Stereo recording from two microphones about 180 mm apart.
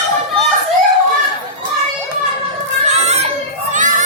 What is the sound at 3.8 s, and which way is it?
Crowd, 45° right (ahead or behind).